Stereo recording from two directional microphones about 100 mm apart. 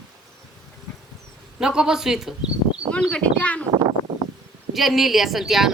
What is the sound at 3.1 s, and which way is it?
Speech, 15° left (ahead or behind).